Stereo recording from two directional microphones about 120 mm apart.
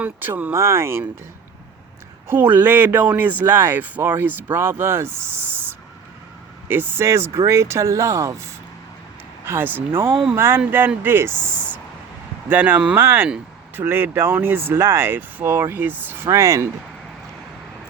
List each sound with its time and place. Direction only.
0.0 s speech: 15° right (ahead or behind)
2.2 s speech: 20° right (ahead or behind)
6.7 s speech: 20° right (ahead or behind)
12.5 s speech: 15° right (ahead or behind)